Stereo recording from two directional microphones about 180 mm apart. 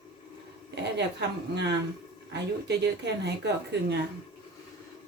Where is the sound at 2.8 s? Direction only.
75° right (ahead or behind).